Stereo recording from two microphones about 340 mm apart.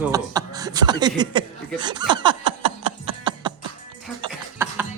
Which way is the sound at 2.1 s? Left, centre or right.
Centre.